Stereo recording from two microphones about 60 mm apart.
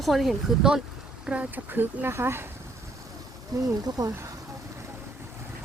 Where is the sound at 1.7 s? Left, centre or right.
Right.